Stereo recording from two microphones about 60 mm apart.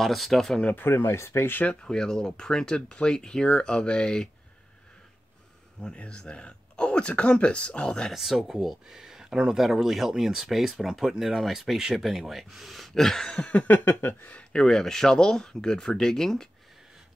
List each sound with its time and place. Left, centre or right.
0.0 s speech: centre
0.7 s speech: left
1.6 s speech: centre
5.8 s speech: centre
8.1 s speech: centre
13.5 s a sound: left
14.5 s speech: centre